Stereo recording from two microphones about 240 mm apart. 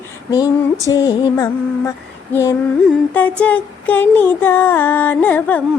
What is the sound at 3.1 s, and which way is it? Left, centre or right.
Music, centre.